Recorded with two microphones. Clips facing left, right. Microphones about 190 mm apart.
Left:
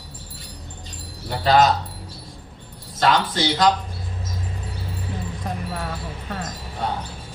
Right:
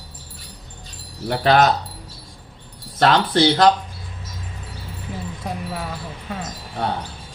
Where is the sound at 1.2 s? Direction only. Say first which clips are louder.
Right 1 dB; 60° right (ahead or behind).